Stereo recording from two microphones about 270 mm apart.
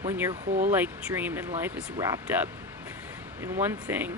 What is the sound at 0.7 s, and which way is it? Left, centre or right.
Speech, centre.